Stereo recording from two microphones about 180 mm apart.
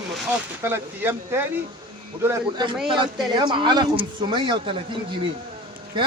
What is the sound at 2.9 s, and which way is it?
A man's voice, 25° right (ahead or behind).